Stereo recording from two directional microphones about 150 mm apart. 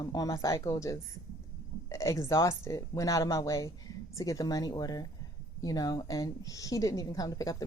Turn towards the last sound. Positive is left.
turn(degrees=25)  # may be behind; listen again after turning